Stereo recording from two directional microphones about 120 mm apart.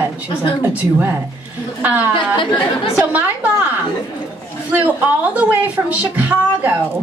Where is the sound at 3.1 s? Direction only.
15° right (ahead or behind).